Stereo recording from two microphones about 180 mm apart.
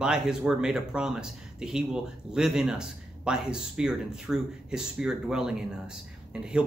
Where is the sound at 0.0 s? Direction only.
5° right (ahead or behind).